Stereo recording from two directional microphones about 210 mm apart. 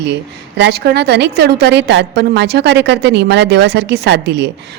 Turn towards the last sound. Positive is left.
turn(degrees=-55)  # may be behind; listen again after turning